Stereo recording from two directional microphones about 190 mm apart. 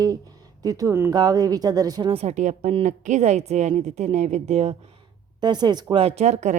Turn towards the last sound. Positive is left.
turn(degrees=-35)  # may be behind; listen again after turning